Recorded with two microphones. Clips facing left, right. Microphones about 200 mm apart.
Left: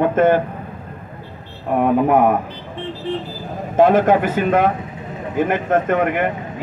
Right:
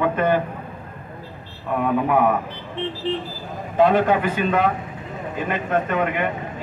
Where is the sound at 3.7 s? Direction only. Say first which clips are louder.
Left 4 dB; 45° left (ahead or behind).